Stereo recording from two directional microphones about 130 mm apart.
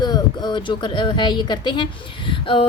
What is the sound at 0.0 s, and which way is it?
A woman's voice, 35° left (ahead or behind).